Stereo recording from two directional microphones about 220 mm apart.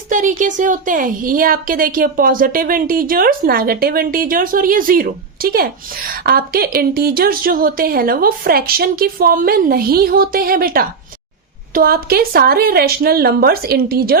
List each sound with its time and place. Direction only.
0.1 s a woman's voice: 35° right (ahead or behind)